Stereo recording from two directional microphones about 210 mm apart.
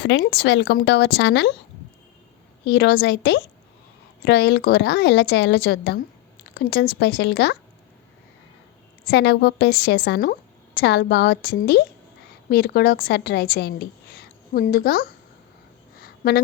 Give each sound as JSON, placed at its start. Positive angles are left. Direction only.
{"t": 0.0, "sound": "speech", "side_deg": 55}
{"t": 2.6, "sound": "a woman's voice", "side_deg": 50}
{"t": 9.0, "sound": "a woman's voice", "side_deg": 50}
{"t": 16.0, "sound": "a sound", "side_deg": 45}